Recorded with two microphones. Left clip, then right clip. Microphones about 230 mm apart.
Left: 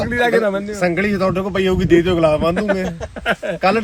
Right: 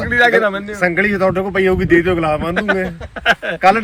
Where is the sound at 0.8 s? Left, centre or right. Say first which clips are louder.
Right 4 dB; centre.